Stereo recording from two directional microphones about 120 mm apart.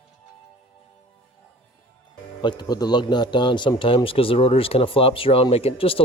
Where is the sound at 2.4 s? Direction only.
35° left (ahead or behind).